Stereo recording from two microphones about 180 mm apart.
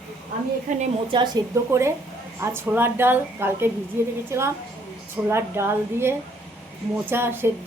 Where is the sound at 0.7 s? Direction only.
45° right (ahead or behind).